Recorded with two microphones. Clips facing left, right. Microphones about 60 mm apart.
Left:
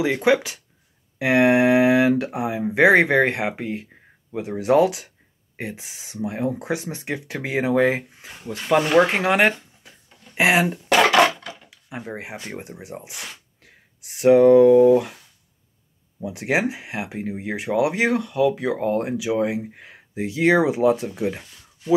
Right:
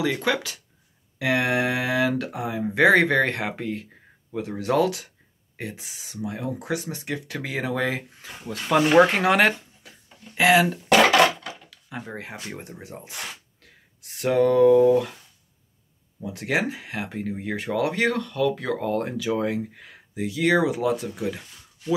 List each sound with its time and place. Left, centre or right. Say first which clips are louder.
0.0 s speech: left 5 dB; left
8.2 s speech: left 1 dB; centre
10.3 s speech: even; left
11.4 s drawer open or close: even; centre
12.5 s speech: left 4 dB; centre
16.2 s speech: left 3 dB; centre